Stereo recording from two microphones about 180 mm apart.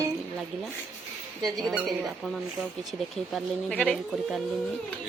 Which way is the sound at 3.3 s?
Centre (ahead or behind).